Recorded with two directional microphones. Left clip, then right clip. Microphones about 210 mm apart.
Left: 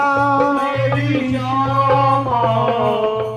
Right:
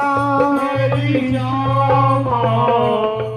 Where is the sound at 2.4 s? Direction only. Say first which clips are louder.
Right 1 dB; 50° right (ahead or behind).